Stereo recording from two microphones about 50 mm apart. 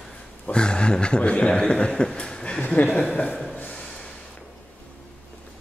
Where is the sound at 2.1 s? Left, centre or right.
Left.